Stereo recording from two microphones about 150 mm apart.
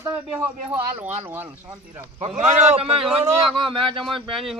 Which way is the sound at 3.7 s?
35° right (ahead or behind).